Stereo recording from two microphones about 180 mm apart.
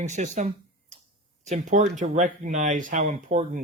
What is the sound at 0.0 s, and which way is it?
Speech, 40° right (ahead or behind).